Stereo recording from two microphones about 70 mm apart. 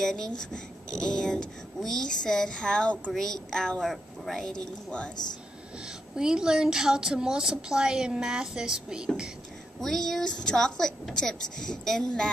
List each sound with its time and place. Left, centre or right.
0.0 s speech: centre
5.1 s speech: left
6.1 s a woman's voice: centre
9.8 s speech: centre